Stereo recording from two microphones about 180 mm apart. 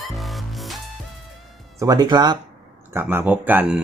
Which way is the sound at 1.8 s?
20° right (ahead or behind).